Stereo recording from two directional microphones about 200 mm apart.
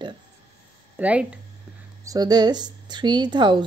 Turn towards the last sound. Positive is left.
turn(degrees=-20)  # may be behind; listen again after turning